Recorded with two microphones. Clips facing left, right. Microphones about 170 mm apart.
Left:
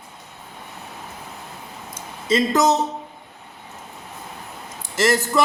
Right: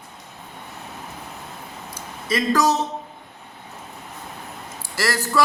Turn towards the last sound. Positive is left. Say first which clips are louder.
# left 3 dB
turn(degrees=25)  # may be behind; listen again after turning